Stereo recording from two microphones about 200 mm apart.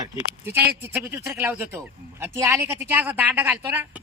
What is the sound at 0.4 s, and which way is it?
Speech, 10° right (ahead or behind).